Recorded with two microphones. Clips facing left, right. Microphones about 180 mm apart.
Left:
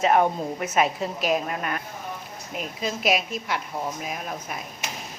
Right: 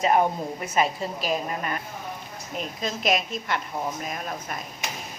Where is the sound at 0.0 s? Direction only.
5° left (ahead or behind).